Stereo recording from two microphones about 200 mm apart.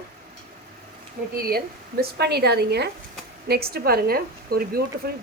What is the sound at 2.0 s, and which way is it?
A woman's voice, 55° right (ahead or behind).